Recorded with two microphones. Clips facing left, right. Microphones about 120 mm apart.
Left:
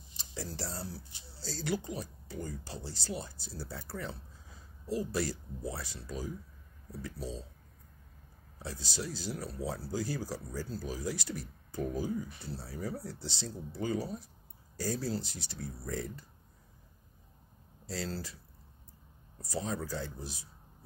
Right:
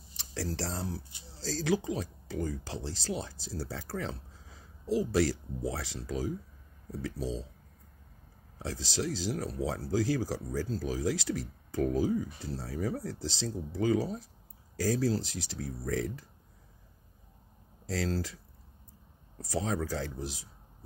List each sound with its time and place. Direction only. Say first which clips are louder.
0.2 s speech: right 5 dB; 85° right
8.5 s speech: right 5 dB; 90° right
17.8 s speech: right 6 dB; 90° right
19.4 s speech: right 4 dB; 90° right